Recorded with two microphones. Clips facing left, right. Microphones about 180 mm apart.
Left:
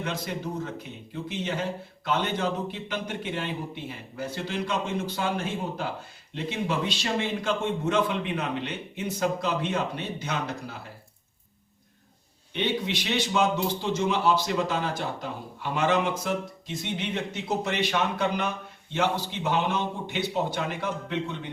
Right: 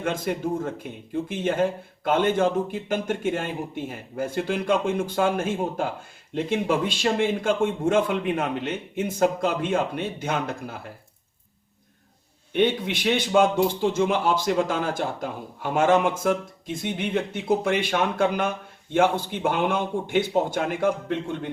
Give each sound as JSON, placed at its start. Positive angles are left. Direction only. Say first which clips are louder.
{"t": 0.0, "sound": "a man's voice", "louder": "right 6 dB", "side_deg": -50}
{"t": 12.5, "sound": "a man's voice", "louder": "right 6 dB", "side_deg": -50}